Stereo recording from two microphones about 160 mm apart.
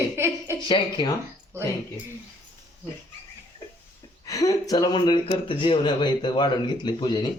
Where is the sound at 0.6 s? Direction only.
30° left (ahead or behind).